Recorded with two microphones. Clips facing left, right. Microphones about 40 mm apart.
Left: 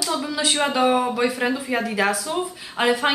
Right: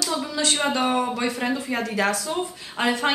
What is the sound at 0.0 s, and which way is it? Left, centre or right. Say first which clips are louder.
A woman's voice: left 1 dB; centre.